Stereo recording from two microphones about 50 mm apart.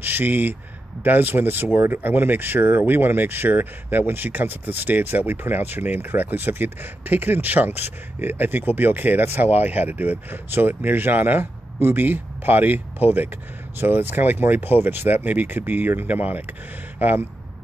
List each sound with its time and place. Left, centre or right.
0.0 s speech: right